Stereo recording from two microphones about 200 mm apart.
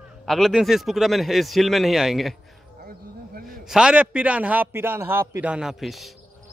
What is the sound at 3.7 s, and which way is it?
A man's voice, 5° right (ahead or behind).